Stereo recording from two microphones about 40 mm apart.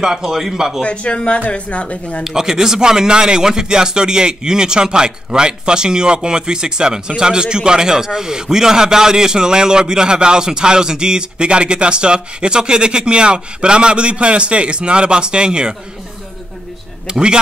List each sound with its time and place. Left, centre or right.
0.0 s a man's voice: centre
0.8 s a woman's voice: left
2.2 s speech: centre
17.1 s speech: right